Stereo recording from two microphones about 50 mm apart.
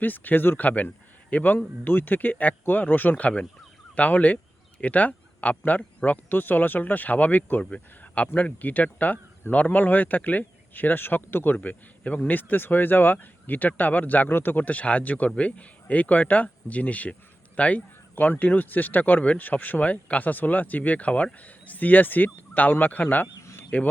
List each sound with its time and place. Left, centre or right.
0.0 s speech: left
7.6 s speech: left
23.6 s a sound: left